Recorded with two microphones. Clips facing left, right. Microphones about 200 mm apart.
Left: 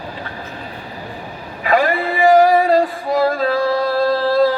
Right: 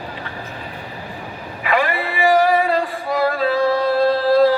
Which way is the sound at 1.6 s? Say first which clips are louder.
Left 4 dB; 40° left (ahead or behind).